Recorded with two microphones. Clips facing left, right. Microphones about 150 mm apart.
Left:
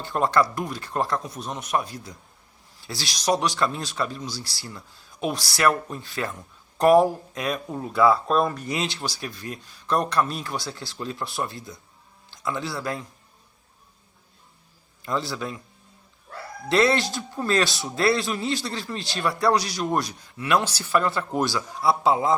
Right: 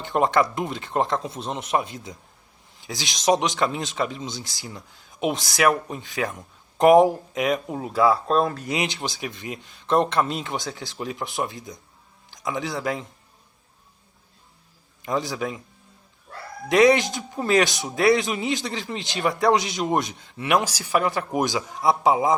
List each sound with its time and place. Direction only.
0.0 s a man's voice: 20° right (ahead or behind)
15.0 s a man's voice: 15° right (ahead or behind)
16.6 s a man's voice: 15° right (ahead or behind)